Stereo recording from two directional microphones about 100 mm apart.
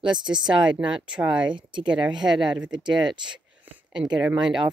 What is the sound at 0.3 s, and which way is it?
Speech, 10° right (ahead or behind).